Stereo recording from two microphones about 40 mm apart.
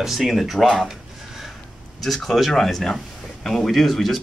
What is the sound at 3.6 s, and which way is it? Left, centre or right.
Speech, centre.